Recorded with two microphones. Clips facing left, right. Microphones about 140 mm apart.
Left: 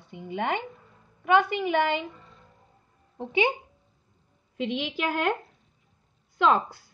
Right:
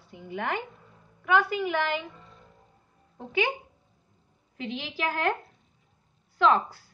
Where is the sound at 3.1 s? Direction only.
20° left (ahead or behind).